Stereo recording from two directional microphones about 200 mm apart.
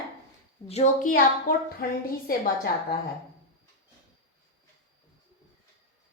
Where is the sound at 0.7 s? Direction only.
35° left (ahead or behind).